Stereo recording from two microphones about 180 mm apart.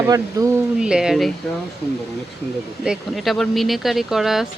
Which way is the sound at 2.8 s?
Centre (ahead or behind).